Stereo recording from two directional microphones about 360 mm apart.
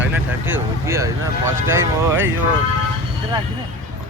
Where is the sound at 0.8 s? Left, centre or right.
Centre.